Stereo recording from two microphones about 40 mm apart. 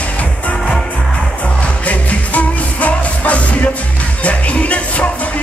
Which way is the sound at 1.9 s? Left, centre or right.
Left.